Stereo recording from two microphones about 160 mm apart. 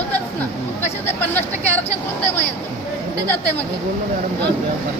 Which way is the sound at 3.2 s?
10° left (ahead or behind).